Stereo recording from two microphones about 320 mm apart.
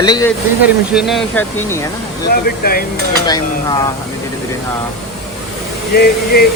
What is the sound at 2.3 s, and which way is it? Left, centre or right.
Speech, left.